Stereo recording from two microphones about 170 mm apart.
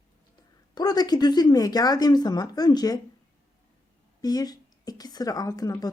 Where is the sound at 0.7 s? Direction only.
25° left (ahead or behind).